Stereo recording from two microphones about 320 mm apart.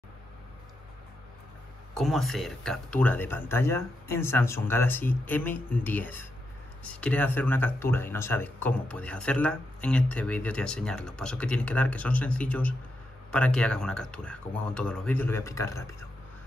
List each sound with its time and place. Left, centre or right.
2.0 s speech: centre